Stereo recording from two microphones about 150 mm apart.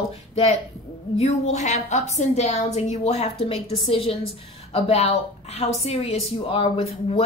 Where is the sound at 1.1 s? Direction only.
45° left (ahead or behind).